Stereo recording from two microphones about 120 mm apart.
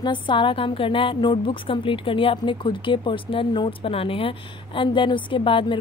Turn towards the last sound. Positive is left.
turn(degrees=45)  # may be behind; listen again after turning